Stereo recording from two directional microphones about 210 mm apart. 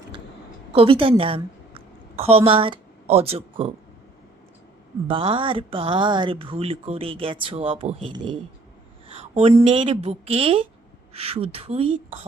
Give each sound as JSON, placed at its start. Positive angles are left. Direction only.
{"t": 0.7, "sound": "a woman's voice", "side_deg": -25}
{"t": 5.0, "sound": "speech", "side_deg": -25}